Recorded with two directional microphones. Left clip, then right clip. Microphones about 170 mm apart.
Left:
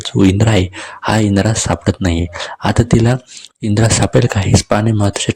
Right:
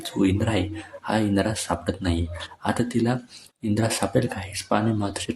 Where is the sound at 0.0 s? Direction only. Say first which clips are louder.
Left 10 dB; 35° left (ahead or behind).